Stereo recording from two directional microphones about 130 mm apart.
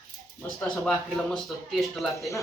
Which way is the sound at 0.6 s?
5° left (ahead or behind).